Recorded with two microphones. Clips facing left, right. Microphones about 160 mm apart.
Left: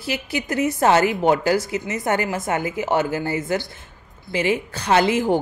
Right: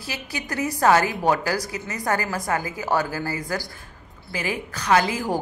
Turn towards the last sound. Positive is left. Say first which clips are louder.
# left 3 dB
turn(degrees=25)  # may be behind; listen again after turning